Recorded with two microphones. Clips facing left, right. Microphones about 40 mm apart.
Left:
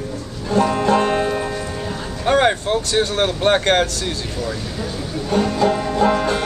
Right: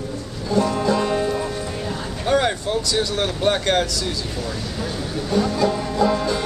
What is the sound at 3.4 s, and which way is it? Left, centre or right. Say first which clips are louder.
Speech: left 3 dB; left.